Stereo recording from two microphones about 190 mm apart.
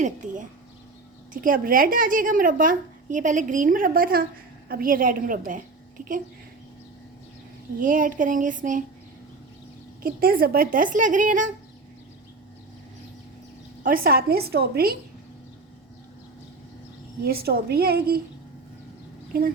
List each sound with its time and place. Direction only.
1.3 s a woman's voice: 45° right (ahead or behind)
7.8 s a woman's voice: 45° right (ahead or behind)
10.0 s a woman's voice: 50° right (ahead or behind)
13.8 s a woman's voice: 50° right (ahead or behind)
17.2 s a woman's voice: 55° right (ahead or behind)
19.3 s speech: 50° right (ahead or behind)